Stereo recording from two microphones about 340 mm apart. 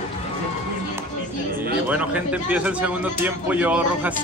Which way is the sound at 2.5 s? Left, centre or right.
Centre.